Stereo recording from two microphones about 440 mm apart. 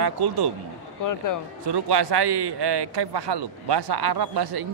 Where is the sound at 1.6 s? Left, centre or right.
Right.